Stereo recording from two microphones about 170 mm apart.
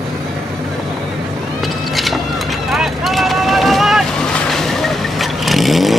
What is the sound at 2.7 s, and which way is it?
Vehicle, centre (ahead or behind).